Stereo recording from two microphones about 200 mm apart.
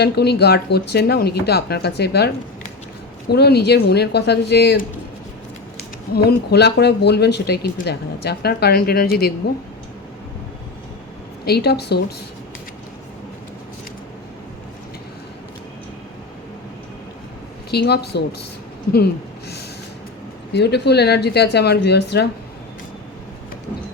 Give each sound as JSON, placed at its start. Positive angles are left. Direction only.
{"t": 0.0, "sound": "a woman's voice", "side_deg": 55}
{"t": 6.1, "sound": "speech", "side_deg": 55}
{"t": 11.4, "sound": "a woman's voice", "side_deg": 55}
{"t": 17.7, "sound": "speech", "side_deg": 55}
{"t": 20.5, "sound": "a woman's voice", "side_deg": 55}